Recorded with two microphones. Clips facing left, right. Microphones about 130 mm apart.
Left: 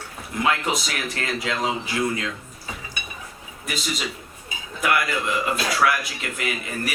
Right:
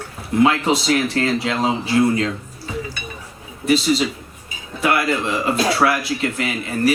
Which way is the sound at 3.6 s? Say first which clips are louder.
Right 12 dB; 30° right (ahead or behind).